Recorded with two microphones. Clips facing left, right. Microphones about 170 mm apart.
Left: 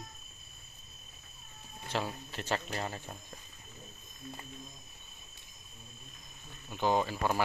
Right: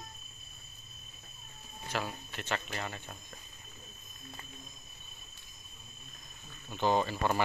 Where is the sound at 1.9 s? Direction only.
30° left (ahead or behind).